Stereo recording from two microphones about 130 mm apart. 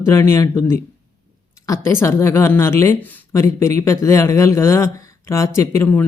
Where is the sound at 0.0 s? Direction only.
20° left (ahead or behind).